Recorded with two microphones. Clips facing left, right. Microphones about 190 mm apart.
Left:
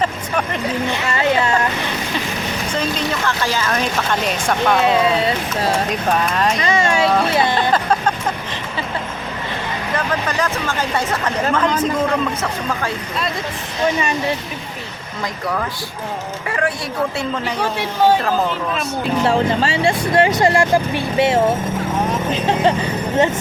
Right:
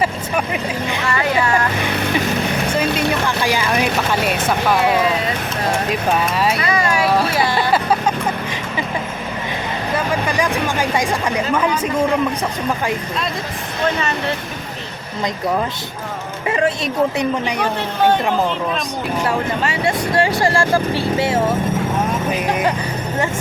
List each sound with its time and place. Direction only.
0.0 s vehicle: 10° right (ahead or behind)
1.0 s speech: 25° left (ahead or behind)
3.2 s speech: 15° right (ahead or behind)
4.8 s speech: 25° left (ahead or behind)
5.9 s speech: 5° right (ahead or behind)
6.7 s a sound: 25° left (ahead or behind)
7.7 s vehicle: 10° right (ahead or behind)
9.9 s speech: 10° right (ahead or behind)
13.8 s speech: 15° left (ahead or behind)
15.2 s a woman's voice: 20° right (ahead or behind)
19.6 s speech: 25° left (ahead or behind)